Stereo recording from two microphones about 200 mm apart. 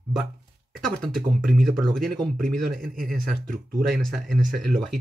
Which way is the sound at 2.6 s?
45° right (ahead or behind).